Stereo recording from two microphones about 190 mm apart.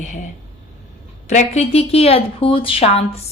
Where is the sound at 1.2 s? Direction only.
35° left (ahead or behind).